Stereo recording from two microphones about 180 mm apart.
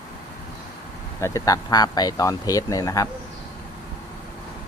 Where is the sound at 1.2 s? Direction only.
15° left (ahead or behind).